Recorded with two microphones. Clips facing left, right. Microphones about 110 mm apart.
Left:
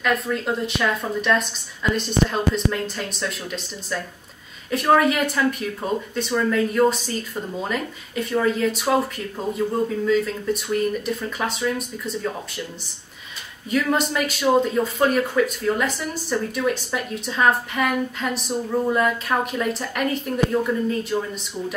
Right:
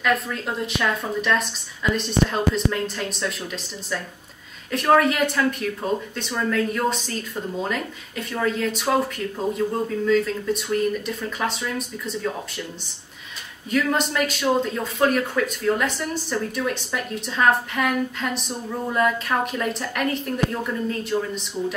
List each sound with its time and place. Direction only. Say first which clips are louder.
0.0 s speech: left 1 dB; centre (ahead or behind)
10.0 s speech: right 4 dB; centre (ahead or behind)
13.7 s speech: left 1 dB; centre (ahead or behind)